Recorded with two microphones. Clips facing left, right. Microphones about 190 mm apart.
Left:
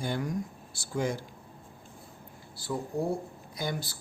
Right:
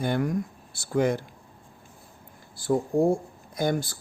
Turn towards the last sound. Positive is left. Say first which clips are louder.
# right 8 dB
turn(degrees=-50)  # may be behind; listen again after turning